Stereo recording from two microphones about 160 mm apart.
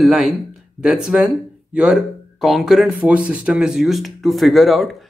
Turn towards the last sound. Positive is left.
turn(degrees=0)  # may be behind; listen again after turning